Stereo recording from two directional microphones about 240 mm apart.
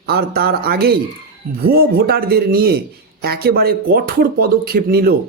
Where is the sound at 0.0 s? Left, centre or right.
Right.